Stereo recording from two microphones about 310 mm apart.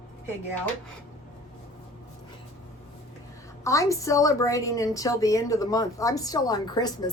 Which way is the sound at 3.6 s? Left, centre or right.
Centre.